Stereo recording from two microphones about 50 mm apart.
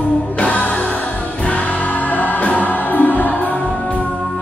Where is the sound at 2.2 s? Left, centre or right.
Left.